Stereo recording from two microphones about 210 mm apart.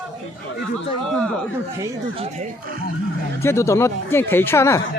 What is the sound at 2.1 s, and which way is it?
Speech, 30° right (ahead or behind).